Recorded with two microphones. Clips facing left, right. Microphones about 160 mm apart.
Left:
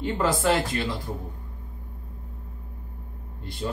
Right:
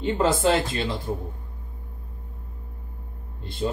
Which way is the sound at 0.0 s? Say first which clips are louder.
Right 3 dB; 25° right (ahead or behind).